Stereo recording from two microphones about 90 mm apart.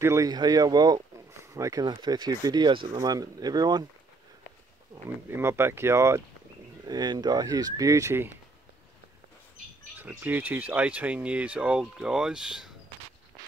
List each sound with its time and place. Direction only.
0.0 s speech: 35° right (ahead or behind)
0.3 s speech: 45° right (ahead or behind)
1.4 s speech: 35° right (ahead or behind)
1.9 s speech: 50° right (ahead or behind)
4.9 s speech: 30° right (ahead or behind)
6.9 s speech: 50° right (ahead or behind); by 8.3 s 30° right (ahead or behind)
9.9 s speech: 20° right (ahead or behind)